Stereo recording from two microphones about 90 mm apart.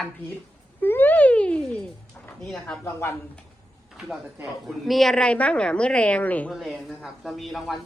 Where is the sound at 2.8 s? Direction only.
30° left (ahead or behind).